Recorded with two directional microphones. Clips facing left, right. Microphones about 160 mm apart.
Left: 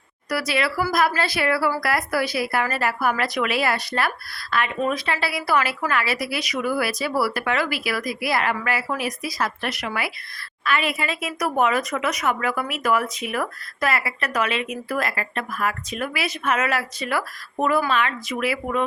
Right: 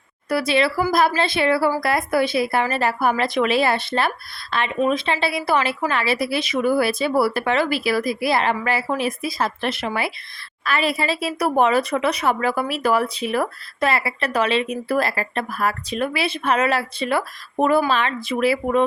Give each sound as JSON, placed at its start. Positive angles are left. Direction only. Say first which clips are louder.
{"t": 0.3, "sound": "speech", "louder": "right 5 dB", "side_deg": -25}